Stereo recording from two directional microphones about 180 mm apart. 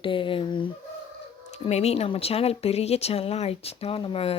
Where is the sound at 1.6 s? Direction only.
35° left (ahead or behind).